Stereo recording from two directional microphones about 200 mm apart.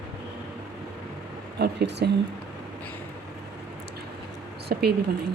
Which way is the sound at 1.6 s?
55° right (ahead or behind).